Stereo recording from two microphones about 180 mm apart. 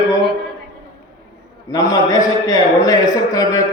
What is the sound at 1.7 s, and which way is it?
A man's voice, 20° left (ahead or behind).